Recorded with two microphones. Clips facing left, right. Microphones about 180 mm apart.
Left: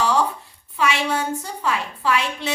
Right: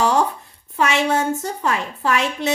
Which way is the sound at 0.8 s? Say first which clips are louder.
Right 3 dB; 45° right (ahead or behind).